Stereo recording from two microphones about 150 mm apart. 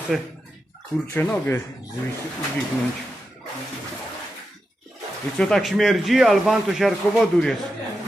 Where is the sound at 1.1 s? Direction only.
15° left (ahead or behind).